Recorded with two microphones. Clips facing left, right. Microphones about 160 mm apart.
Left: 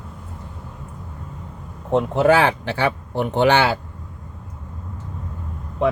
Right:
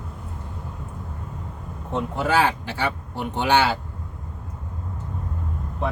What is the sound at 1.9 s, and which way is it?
Speech, 65° left (ahead or behind).